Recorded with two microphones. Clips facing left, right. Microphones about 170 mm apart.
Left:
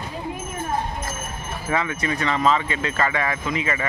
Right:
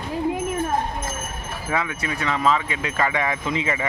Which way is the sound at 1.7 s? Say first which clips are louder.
Left 2 dB; 5° right (ahead or behind).